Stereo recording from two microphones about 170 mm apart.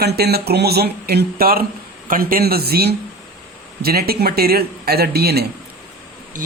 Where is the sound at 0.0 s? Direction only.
70° right (ahead or behind).